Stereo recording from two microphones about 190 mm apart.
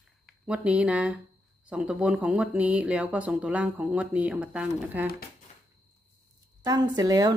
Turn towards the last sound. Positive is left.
turn(degrees=-20)  # may be behind; listen again after turning